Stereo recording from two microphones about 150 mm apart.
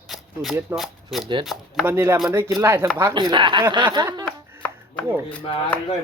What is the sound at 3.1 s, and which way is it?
Speech, 30° right (ahead or behind).